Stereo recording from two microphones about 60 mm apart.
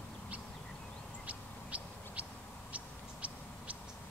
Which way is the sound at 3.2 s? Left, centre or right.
Right.